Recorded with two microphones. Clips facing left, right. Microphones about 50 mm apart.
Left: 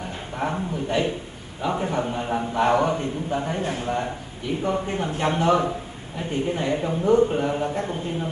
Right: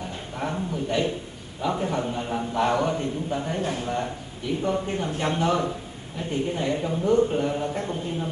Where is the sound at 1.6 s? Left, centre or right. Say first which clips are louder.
Left 1 dB; centre.